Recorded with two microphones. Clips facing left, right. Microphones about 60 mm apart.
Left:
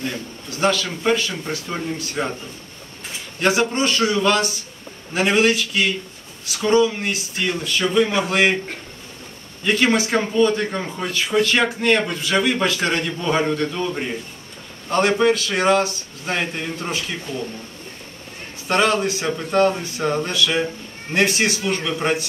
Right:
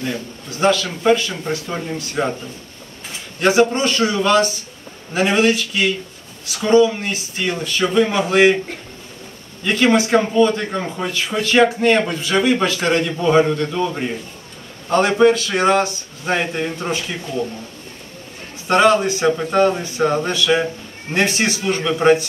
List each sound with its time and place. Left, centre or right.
0.6 s speech: centre
3.5 s a man's voice: centre
9.7 s a man's voice: centre
18.7 s a man's voice: centre